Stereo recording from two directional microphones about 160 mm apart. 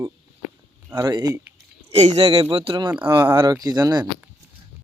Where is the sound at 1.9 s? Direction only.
40° right (ahead or behind); by 4.0 s 25° right (ahead or behind).